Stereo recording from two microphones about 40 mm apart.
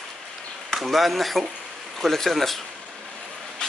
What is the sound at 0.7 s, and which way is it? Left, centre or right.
Speech, centre.